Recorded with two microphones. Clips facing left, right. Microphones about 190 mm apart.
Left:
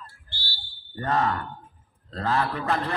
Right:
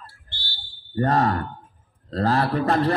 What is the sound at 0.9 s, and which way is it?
A man's voice, 35° right (ahead or behind).